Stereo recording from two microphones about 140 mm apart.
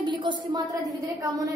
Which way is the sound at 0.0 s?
35° right (ahead or behind).